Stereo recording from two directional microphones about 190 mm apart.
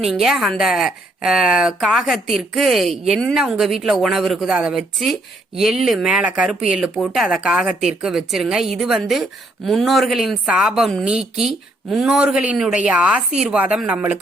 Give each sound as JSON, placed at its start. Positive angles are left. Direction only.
{"t": 0.0, "sound": "a woman's voice", "side_deg": 0}